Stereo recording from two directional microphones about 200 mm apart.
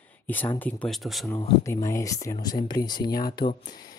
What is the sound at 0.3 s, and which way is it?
Speech, 10° left (ahead or behind).